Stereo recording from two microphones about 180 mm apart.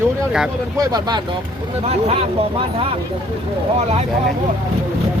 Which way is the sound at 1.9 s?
35° right (ahead or behind).